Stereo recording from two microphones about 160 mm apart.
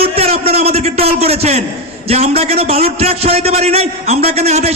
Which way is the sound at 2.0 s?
40° right (ahead or behind).